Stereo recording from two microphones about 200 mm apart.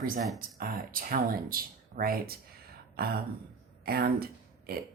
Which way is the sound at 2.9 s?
50° right (ahead or behind).